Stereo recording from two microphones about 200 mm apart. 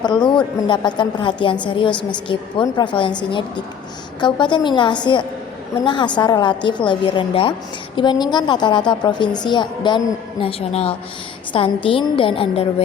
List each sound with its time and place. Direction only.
0.0 s a woman's voice: 20° left (ahead or behind)